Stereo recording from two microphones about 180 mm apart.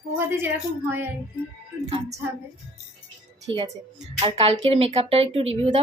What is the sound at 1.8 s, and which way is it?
Speech, 30° right (ahead or behind).